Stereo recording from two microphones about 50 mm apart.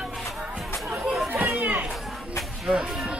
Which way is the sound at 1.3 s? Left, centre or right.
Right.